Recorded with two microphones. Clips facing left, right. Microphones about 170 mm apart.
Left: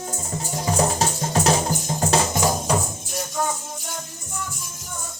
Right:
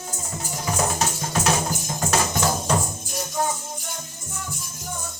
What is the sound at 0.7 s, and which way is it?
Music, 35° left (ahead or behind).